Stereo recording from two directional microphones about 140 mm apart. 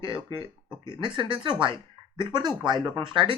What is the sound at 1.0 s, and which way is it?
A woman's voice, 35° right (ahead or behind).